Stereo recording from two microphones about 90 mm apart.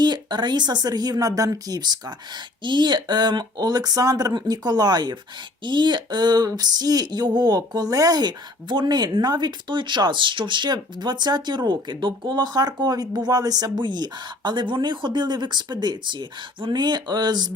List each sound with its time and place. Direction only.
0.0 s speech: 55° right (ahead or behind)